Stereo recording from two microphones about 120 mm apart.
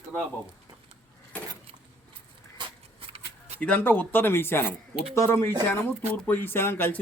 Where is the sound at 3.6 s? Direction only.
10° left (ahead or behind).